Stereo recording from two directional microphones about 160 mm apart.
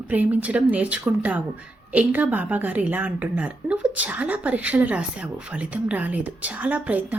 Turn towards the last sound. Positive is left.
turn(degrees=-10)  # may be behind; listen again after turning